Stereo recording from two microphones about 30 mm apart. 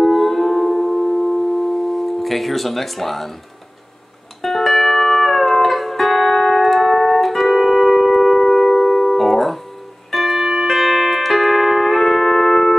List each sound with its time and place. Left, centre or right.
0.0 s music: centre
4.4 s music: centre
6.3 s music: centre
6.6 s music: centre
9.1 s music: centre